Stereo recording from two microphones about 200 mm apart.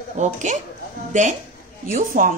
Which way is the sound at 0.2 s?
35° right (ahead or behind).